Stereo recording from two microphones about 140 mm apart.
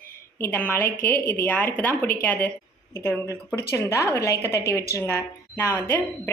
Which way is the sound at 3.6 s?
20° left (ahead or behind).